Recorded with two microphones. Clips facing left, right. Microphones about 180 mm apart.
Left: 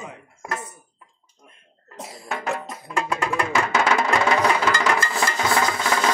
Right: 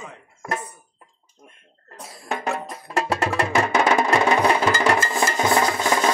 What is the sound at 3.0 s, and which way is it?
Music, 35° right (ahead or behind).